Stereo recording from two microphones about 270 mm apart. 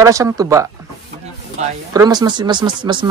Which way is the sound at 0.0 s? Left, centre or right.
Centre.